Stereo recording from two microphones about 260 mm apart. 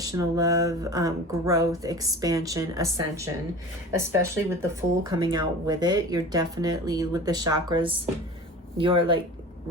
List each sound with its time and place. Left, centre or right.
0.0 s speech: centre